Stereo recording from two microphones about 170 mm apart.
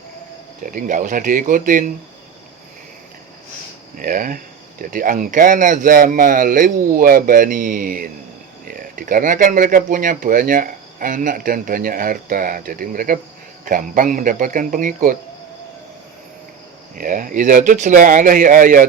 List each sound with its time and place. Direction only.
0.6 s speech: 50° right (ahead or behind)
3.9 s speech: 55° right (ahead or behind)
16.9 s speech: 55° right (ahead or behind)